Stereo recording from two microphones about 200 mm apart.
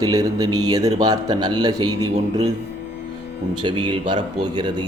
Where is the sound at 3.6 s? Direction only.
25° right (ahead or behind).